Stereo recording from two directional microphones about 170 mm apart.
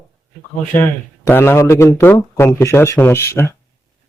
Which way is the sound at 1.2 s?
10° left (ahead or behind).